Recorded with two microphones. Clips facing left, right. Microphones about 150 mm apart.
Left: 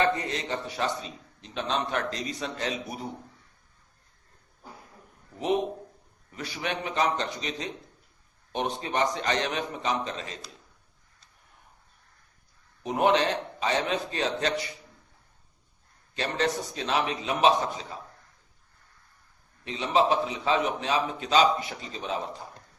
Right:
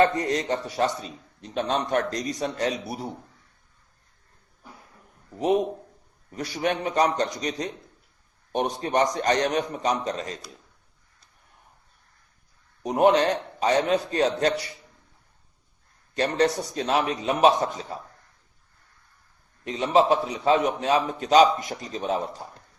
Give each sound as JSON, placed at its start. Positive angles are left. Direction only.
{"t": 0.0, "sound": "a man's voice", "side_deg": -45}
{"t": 6.3, "sound": "a man's voice", "side_deg": -40}
{"t": 12.8, "sound": "a man's voice", "side_deg": -40}
{"t": 16.1, "sound": "a man's voice", "side_deg": -40}
{"t": 19.6, "sound": "a man's voice", "side_deg": -40}